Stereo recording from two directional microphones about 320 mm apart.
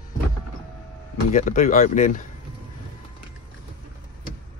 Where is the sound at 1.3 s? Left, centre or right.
Left.